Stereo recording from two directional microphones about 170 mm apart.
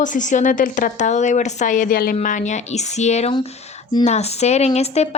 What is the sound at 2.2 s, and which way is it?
Speech, 45° left (ahead or behind).